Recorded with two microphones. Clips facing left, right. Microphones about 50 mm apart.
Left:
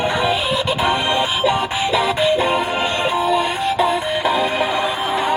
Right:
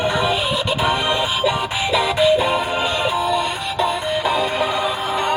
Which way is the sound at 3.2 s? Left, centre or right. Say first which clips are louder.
Left 3 dB; centre.